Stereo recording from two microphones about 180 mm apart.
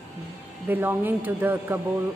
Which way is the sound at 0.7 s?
10° right (ahead or behind).